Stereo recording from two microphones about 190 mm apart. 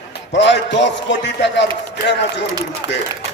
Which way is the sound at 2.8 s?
20° right (ahead or behind).